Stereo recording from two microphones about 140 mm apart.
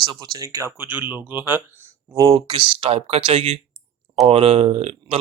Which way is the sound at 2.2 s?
35° right (ahead or behind).